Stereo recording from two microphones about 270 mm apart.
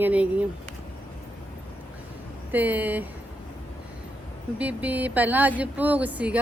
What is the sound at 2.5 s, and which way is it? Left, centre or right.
Speech, centre.